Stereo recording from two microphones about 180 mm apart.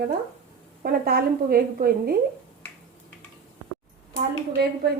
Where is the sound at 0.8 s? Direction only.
55° right (ahead or behind).